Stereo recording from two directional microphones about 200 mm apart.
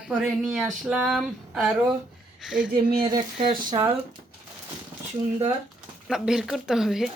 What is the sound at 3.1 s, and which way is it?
Speech, 25° right (ahead or behind).